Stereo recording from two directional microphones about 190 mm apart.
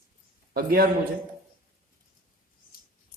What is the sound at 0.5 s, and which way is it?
Speech, 50° right (ahead or behind).